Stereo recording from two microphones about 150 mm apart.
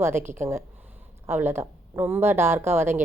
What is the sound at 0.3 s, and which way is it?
A woman's voice, 15° right (ahead or behind).